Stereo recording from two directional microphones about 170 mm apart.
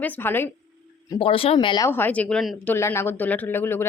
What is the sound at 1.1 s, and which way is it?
Speech, 35° left (ahead or behind).